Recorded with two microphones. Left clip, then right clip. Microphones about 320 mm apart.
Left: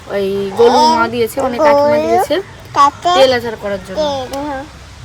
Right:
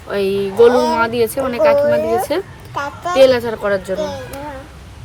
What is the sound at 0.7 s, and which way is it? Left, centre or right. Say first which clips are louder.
Speech: left 5 dB; left.